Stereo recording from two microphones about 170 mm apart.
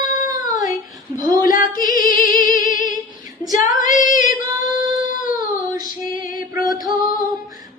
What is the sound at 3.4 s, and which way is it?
Female singing, 20° right (ahead or behind).